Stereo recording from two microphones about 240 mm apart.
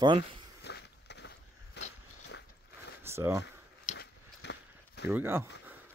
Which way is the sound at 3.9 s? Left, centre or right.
Left.